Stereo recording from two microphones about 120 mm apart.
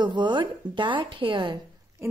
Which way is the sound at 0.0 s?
40° right (ahead or behind).